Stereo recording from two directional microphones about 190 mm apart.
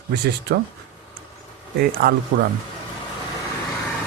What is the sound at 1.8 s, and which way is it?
Speech, 50° right (ahead or behind).